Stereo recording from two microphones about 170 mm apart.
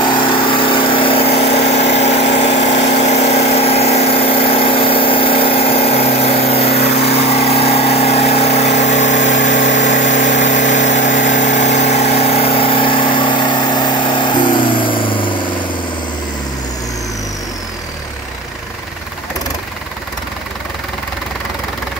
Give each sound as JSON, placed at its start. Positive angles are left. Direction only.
{"t": 0.4, "sound": "vehicle", "side_deg": 30}